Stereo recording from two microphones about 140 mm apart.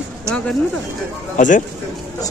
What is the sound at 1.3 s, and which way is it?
Speech, 65° left (ahead or behind).